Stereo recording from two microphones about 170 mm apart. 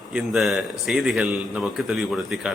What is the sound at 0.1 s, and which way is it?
A man's voice, 5° right (ahead or behind).